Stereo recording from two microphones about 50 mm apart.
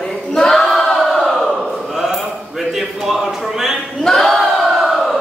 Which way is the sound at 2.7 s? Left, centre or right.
Centre.